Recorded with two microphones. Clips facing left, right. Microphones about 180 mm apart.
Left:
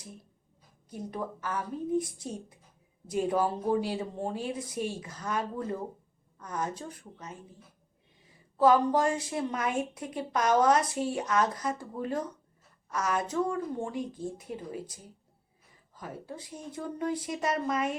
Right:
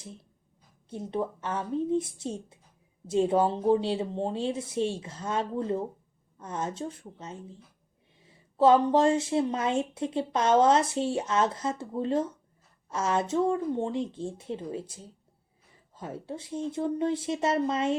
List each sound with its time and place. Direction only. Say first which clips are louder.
0.0 s speech: right 3 dB; 25° right (ahead or behind)